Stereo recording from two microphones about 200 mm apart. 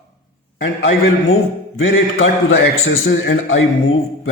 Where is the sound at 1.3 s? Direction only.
85° left.